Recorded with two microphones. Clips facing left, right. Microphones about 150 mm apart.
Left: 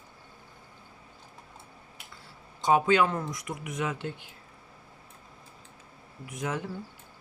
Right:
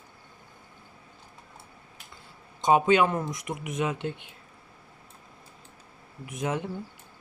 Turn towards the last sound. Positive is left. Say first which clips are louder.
# right 3 dB
turn(degrees=-20)  # may be behind; listen again after turning